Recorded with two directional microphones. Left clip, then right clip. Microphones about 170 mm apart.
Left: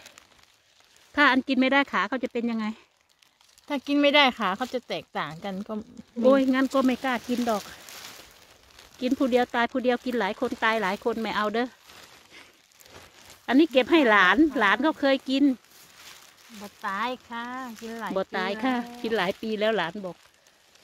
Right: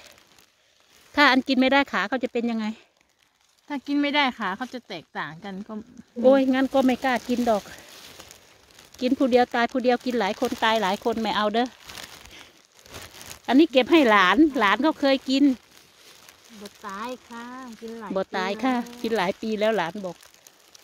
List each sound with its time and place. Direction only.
1.1 s speech: 25° right (ahead or behind)
3.6 s speech: 40° left (ahead or behind)
6.2 s speech: 15° right (ahead or behind)
8.9 s speech: 20° right (ahead or behind)
12.9 s a sound: 70° right (ahead or behind)
13.5 s speech: 20° right (ahead or behind)
16.8 s speech: 45° left (ahead or behind)
18.1 s speech: 20° right (ahead or behind)